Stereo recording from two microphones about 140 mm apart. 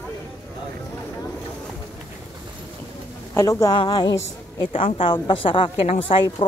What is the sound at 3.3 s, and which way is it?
A woman's voice, 20° left (ahead or behind).